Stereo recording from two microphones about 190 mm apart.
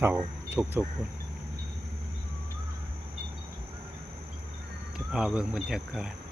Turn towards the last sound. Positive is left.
turn(degrees=-5)  # may be behind; listen again after turning